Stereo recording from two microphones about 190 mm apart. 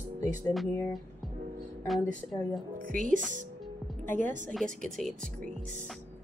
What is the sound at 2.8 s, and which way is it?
Speech, 45° right (ahead or behind).